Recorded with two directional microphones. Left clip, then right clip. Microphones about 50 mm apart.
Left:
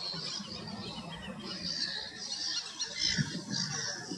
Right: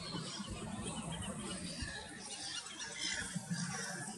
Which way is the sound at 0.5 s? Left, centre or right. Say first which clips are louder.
Left 4 dB; centre.